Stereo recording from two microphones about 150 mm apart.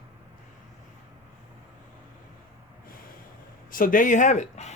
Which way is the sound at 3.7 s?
65° left (ahead or behind).